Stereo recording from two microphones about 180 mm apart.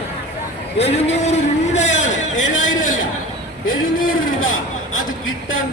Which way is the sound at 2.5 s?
45° left (ahead or behind).